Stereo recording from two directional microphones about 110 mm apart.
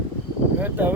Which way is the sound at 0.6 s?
15° right (ahead or behind).